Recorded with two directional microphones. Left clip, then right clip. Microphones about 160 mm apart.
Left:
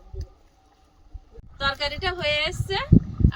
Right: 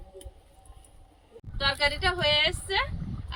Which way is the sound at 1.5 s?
5° right (ahead or behind).